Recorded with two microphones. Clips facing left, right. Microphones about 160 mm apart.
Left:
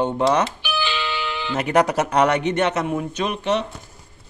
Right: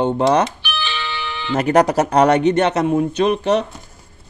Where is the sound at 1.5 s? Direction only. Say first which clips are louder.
Right 4 dB; 40° right (ahead or behind).